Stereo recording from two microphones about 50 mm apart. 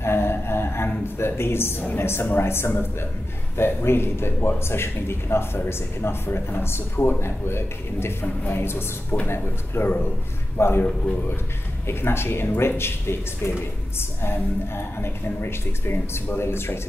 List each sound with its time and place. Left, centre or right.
0.0 s a sound: left
1.0 s a woman's voice: left
11.9 s a woman's voice: left